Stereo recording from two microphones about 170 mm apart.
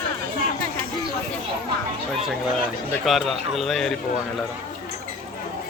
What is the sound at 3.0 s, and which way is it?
Speech, centre (ahead or behind).